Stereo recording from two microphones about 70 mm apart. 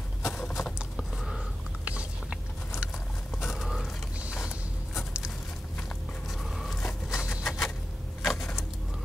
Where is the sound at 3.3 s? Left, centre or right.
Centre.